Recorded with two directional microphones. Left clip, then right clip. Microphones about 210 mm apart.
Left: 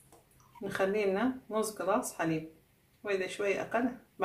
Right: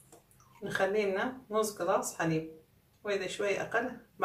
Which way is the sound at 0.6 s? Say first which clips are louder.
Even; 35° left (ahead or behind).